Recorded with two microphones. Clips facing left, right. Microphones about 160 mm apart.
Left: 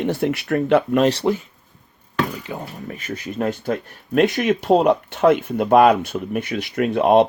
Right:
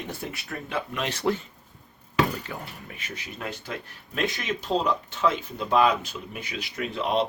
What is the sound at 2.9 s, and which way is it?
Speech, 45° left (ahead or behind).